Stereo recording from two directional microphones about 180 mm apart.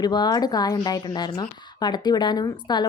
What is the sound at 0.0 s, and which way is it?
Speech, 25° left (ahead or behind).